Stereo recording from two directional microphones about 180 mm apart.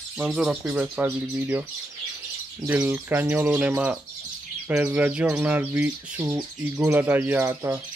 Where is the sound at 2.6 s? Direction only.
10° right (ahead or behind).